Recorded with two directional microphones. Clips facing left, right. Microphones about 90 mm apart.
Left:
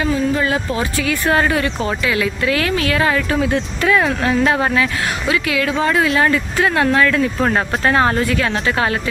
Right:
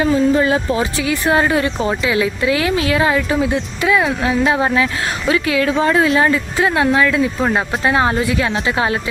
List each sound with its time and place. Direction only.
0.0 s speech: 30° right (ahead or behind)